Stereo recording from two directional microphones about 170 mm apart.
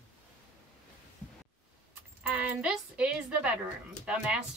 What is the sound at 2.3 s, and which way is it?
A woman's voice, 10° right (ahead or behind).